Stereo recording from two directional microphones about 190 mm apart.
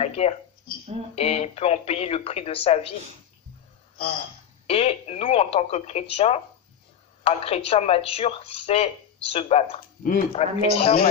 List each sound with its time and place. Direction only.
0.0 s a woman's voice: 35° left (ahead or behind)
4.6 s a woman's voice: 30° left (ahead or behind)